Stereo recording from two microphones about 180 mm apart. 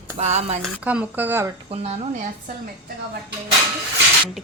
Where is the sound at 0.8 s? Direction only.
10° right (ahead or behind).